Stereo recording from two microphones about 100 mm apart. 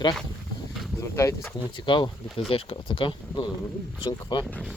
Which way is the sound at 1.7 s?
55° left (ahead or behind).